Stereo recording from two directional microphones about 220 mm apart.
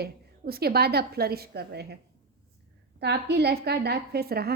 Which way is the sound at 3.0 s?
50° right (ahead or behind).